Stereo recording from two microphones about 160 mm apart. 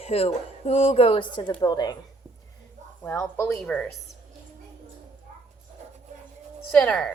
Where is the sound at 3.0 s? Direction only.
15° left (ahead or behind).